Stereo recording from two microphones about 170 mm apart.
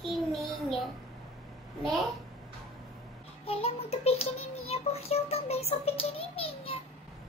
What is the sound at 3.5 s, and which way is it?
Music, 35° left (ahead or behind).